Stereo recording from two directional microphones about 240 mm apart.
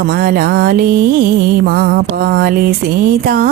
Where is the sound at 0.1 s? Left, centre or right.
Right.